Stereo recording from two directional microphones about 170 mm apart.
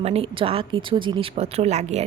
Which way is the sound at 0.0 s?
35° right (ahead or behind).